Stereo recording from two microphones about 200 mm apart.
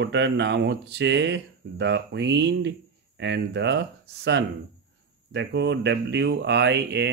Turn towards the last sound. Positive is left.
turn(degrees=-60)  # may be behind; listen again after turning